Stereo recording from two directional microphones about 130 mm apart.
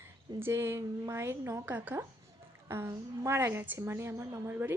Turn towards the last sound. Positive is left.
turn(degrees=-15)  # may be behind; listen again after turning